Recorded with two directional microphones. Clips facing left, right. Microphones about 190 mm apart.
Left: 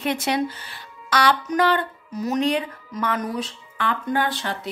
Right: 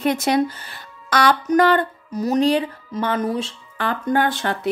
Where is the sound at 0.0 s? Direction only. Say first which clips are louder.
Right 5 dB; 40° right (ahead or behind); by 3.5 s 25° right (ahead or behind).